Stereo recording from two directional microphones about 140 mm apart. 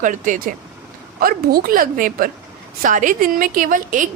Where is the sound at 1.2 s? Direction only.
90° right.